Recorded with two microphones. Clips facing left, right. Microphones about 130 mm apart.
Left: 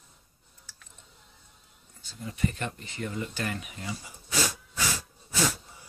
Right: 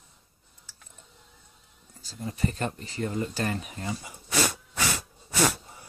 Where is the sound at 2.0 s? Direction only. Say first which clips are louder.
Right 1 dB; 40° right (ahead or behind).